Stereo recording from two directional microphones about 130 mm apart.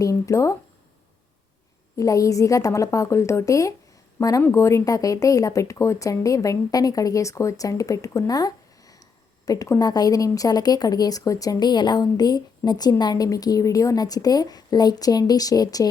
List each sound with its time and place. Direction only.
0.0 s a woman's voice: 25° left (ahead or behind)
2.0 s a woman's voice: 25° left (ahead or behind)